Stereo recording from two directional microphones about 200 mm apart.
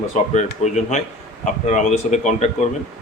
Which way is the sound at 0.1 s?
35° left (ahead or behind).